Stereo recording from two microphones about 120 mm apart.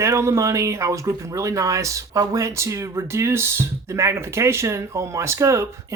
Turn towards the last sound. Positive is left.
turn(degrees=-25)  # may be behind; listen again after turning